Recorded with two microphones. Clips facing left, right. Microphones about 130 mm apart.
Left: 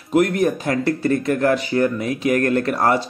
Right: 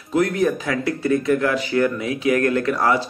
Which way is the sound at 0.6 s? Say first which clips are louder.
Left 3 dB; 45° left (ahead or behind).